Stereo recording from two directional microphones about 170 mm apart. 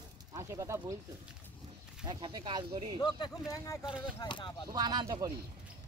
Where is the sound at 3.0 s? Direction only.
25° left (ahead or behind).